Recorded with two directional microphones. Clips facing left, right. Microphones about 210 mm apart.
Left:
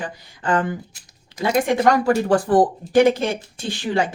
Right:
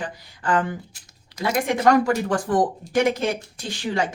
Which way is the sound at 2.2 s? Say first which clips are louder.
Left 5 dB; 35° left (ahead or behind).